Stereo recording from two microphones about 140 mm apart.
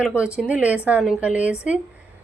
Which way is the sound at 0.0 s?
5° right (ahead or behind).